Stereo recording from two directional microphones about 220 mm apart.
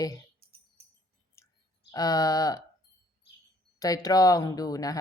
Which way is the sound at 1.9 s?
15° left (ahead or behind).